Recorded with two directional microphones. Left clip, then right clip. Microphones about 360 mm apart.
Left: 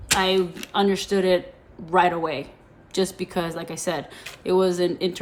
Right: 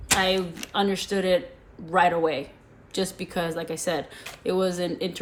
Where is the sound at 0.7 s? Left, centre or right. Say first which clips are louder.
Left 3 dB; centre.